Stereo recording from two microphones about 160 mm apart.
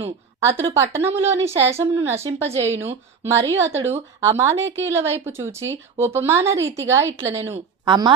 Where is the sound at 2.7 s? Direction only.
40° right (ahead or behind).